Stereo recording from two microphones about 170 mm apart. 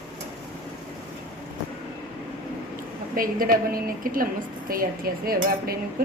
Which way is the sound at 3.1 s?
55° right (ahead or behind).